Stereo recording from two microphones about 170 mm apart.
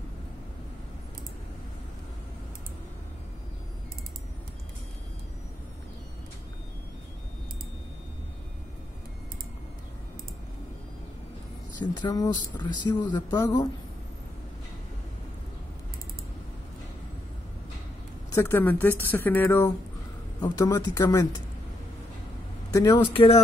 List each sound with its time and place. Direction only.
11.9 s speech: 25° left (ahead or behind)
18.3 s speech: 15° left (ahead or behind)
22.7 s speech: 20° left (ahead or behind)